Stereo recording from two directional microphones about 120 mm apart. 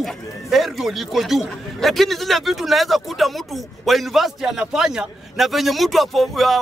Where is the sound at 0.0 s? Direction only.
Centre (ahead or behind).